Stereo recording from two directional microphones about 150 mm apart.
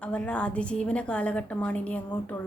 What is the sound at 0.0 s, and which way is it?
A woman's voice, 10° left (ahead or behind).